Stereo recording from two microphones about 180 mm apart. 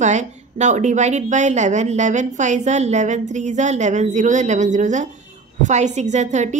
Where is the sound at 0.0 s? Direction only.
40° right (ahead or behind).